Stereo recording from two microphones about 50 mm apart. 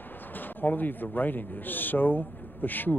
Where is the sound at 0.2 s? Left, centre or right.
Left.